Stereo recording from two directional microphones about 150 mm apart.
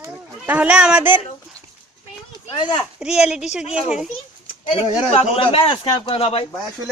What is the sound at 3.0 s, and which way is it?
Speech, 5° right (ahead or behind).